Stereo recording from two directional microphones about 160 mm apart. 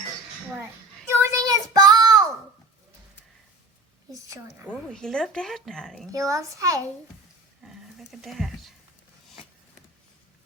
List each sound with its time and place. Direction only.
1.1 s child singing: 15° right (ahead or behind)
4.7 s speech: 5° left (ahead or behind)
6.1 s a child's voice: 20° right (ahead or behind)
7.6 s a sound: centre (ahead or behind)